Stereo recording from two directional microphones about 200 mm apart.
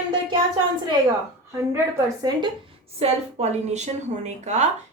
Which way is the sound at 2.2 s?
20° right (ahead or behind).